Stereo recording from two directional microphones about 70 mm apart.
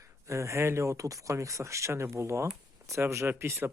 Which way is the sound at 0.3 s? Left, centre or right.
Right.